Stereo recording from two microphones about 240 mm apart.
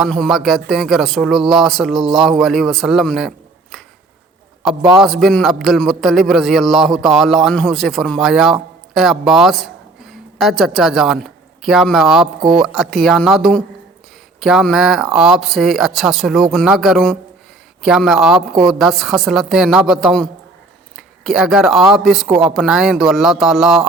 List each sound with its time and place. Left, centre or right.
0.0 s a man's voice: centre
5.0 s a man's voice: centre
12.4 s speech: centre
12.6 s a man's voice: centre